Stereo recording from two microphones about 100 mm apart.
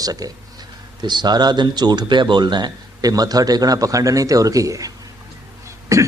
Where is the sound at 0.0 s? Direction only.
40° right (ahead or behind).